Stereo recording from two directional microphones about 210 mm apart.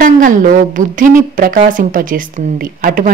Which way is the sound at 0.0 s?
40° right (ahead or behind).